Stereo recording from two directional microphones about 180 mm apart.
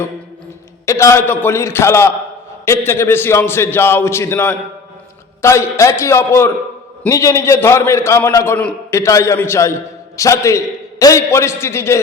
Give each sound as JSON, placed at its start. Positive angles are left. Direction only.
{"t": 0.9, "sound": "a man's voice", "side_deg": 15}